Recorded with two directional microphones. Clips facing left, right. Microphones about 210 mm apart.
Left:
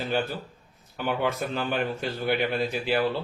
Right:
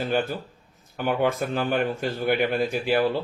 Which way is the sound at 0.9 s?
50° right (ahead or behind).